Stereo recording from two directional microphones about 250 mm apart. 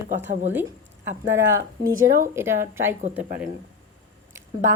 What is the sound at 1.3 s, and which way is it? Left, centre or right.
A woman's voice, centre.